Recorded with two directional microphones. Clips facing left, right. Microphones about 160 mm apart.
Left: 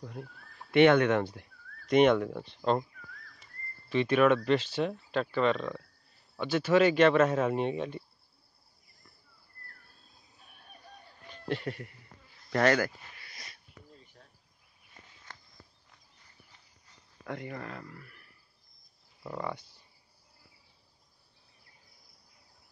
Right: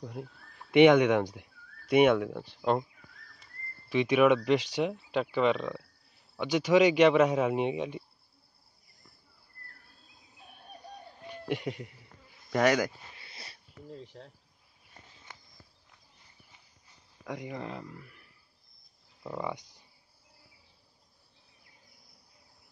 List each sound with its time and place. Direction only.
0.0 s speech: 15° right (ahead or behind)
3.9 s speech: 10° right (ahead or behind)
11.2 s a man's voice: 15° right (ahead or behind)
12.4 s a sound: 10° right (ahead or behind); by 13.6 s 30° right (ahead or behind)
13.8 s insect: 85° right
17.2 s speech: 10° right (ahead or behind)
19.4 s speech: 15° right (ahead or behind)